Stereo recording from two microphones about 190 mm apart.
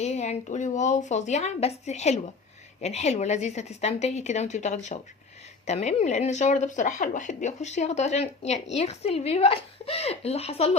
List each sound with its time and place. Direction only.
0.0 s speech: 35° left (ahead or behind)